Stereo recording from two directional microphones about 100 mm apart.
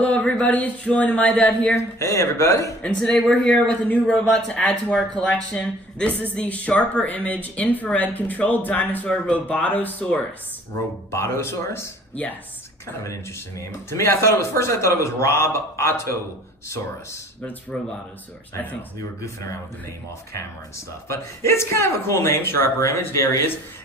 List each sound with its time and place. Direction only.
0.0 s speech: 15° left (ahead or behind)
1.8 s speech: 30° left (ahead or behind)
2.8 s speech: 10° left (ahead or behind); by 11.9 s 25° left (ahead or behind)
13.0 s speech: 30° left (ahead or behind)
20.3 s speech: 30° left (ahead or behind)